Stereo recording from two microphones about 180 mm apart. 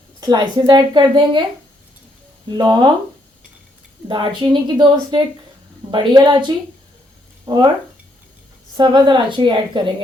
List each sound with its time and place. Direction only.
0.2 s a woman's voice: 25° right (ahead or behind)
2.5 s a woman's voice: 25° right (ahead or behind)
4.1 s a woman's voice: 25° right (ahead or behind)
8.7 s a woman's voice: 25° right (ahead or behind)